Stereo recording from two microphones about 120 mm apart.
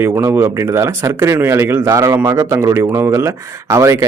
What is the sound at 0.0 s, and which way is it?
Speech, 20° right (ahead or behind).